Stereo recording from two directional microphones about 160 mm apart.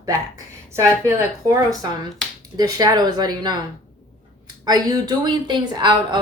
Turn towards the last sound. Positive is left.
turn(degrees=-25)  # may be behind; listen again after turning